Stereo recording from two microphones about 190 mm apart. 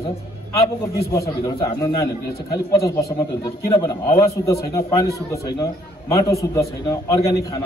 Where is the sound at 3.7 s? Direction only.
20° left (ahead or behind).